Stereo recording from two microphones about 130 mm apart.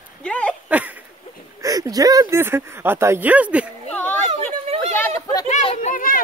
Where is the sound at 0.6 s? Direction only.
10° right (ahead or behind).